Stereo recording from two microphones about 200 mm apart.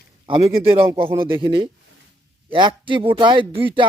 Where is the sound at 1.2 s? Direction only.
25° right (ahead or behind).